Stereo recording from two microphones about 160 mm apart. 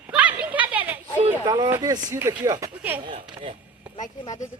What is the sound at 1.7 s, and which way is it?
Speech, 20° right (ahead or behind).